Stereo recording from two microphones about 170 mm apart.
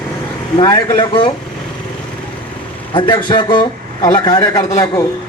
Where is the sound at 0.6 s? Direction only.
25° left (ahead or behind).